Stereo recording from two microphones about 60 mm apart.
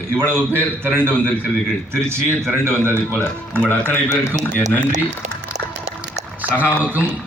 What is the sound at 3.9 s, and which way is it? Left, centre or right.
Speech, left.